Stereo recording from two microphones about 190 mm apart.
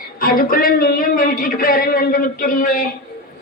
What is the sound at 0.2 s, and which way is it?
Speech, 50° left (ahead or behind).